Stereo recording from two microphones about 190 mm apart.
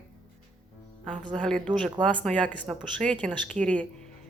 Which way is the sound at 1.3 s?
5° left (ahead or behind).